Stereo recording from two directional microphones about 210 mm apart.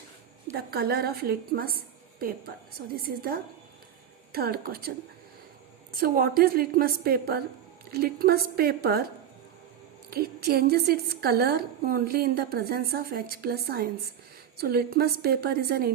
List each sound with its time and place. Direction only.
0.5 s a woman's voice: 50° right (ahead or behind)
5.9 s a woman's voice: 45° right (ahead or behind)
10.1 s a woman's voice: 50° right (ahead or behind)